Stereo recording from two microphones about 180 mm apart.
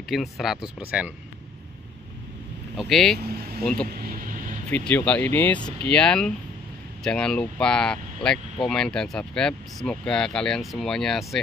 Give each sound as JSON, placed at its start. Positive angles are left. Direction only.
{"t": 0.1, "sound": "speech", "side_deg": 0}
{"t": 2.8, "sound": "speech", "side_deg": 0}
{"t": 4.1, "sound": "vehicle", "side_deg": -50}
{"t": 4.6, "sound": "speech", "side_deg": 10}